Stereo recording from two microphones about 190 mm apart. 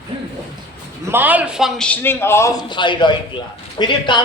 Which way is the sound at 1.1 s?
10° right (ahead or behind).